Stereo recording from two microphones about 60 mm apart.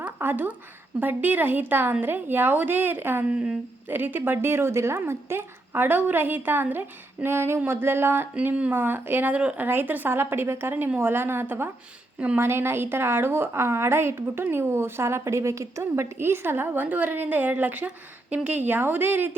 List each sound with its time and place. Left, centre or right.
0.2 s a woman's voice: right
3.2 s a woman's voice: centre
3.8 s a woman's voice: right
9.3 s speech: right
9.6 s a woman's voice: right